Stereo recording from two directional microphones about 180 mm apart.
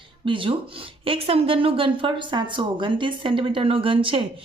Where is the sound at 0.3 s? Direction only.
30° right (ahead or behind).